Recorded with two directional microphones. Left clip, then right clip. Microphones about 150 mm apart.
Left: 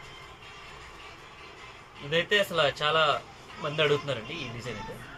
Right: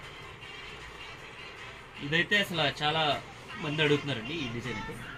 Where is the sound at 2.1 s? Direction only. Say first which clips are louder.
Left 2 dB; 55° left (ahead or behind).